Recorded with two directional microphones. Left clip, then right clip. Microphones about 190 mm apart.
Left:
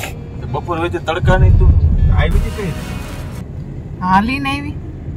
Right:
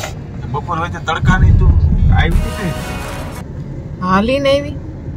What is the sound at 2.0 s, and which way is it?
Speech, 10° right (ahead or behind).